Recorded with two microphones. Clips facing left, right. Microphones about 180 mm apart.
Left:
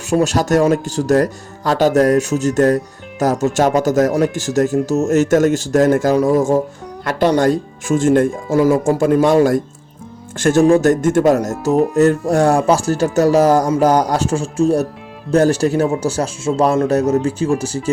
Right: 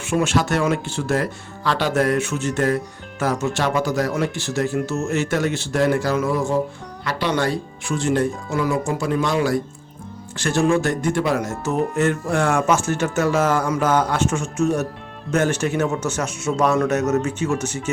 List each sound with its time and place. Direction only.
0.1 s speech: 40° left (ahead or behind)